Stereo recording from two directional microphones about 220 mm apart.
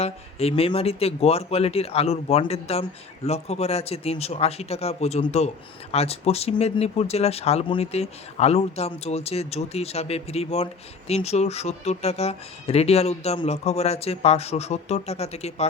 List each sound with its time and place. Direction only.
0.0 s speech: 30° left (ahead or behind)